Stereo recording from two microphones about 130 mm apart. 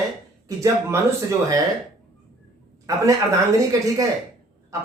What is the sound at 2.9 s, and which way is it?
Speech, 25° right (ahead or behind).